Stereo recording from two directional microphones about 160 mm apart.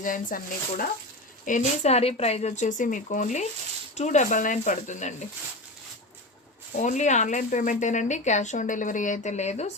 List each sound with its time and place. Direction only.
0.0 s speech: 55° left (ahead or behind)
1.5 s speech: 50° left (ahead or behind)
6.7 s speech: 50° left (ahead or behind)